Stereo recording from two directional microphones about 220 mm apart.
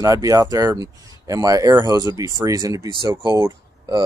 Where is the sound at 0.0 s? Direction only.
15° right (ahead or behind).